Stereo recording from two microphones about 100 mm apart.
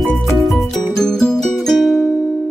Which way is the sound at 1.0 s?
5° left (ahead or behind).